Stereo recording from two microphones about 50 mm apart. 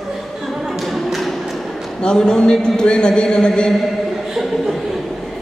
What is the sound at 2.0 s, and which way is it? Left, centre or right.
A man's voice, centre.